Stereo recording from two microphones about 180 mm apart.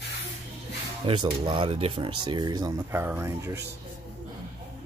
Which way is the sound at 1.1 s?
25° right (ahead or behind).